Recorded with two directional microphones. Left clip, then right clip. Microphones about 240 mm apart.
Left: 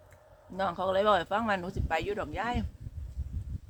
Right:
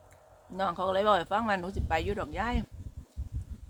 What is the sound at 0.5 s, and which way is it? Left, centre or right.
Speech, centre.